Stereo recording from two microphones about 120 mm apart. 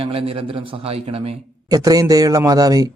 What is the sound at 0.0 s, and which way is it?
A man's voice, 50° right (ahead or behind).